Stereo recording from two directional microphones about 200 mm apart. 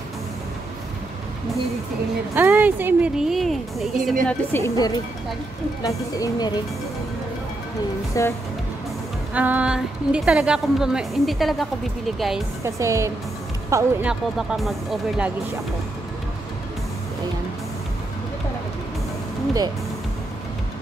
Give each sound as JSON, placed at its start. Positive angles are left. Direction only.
{"t": 2.3, "sound": "speech", "side_deg": -10}
{"t": 8.2, "sound": "speech", "side_deg": 15}
{"t": 9.3, "sound": "speech", "side_deg": -5}
{"t": 12.6, "sound": "speech", "side_deg": -15}
{"t": 14.0, "sound": "speech", "side_deg": -5}